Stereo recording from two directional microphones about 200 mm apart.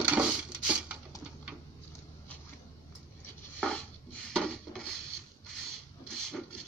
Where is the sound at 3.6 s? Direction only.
5° left (ahead or behind).